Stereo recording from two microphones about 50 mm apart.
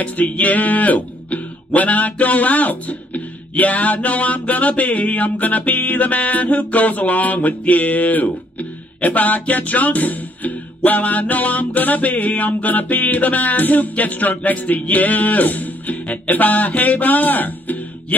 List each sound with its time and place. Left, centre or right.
0.0 s speech: left